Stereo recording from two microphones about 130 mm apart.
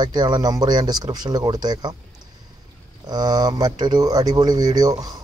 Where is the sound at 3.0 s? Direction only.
30° right (ahead or behind).